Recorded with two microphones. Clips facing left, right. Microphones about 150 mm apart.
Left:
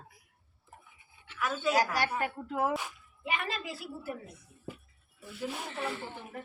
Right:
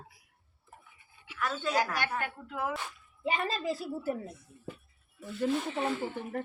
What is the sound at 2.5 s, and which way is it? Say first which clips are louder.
Speech: left 4 dB; 35° left (ahead or behind).